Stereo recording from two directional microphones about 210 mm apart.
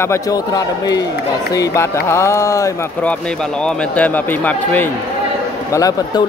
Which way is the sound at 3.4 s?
5° left (ahead or behind).